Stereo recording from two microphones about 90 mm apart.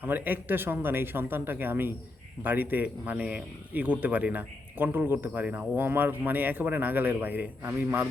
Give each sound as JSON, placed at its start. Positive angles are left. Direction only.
{"t": 0.0, "sound": "speech", "side_deg": -20}